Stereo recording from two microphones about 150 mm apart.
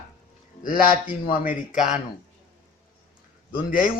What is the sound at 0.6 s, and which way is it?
Speech, 70° left (ahead or behind).